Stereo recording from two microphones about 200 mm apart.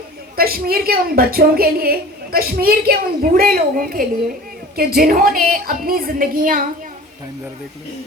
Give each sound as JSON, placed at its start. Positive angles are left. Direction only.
{"t": 0.3, "sound": "a woman's voice", "side_deg": -50}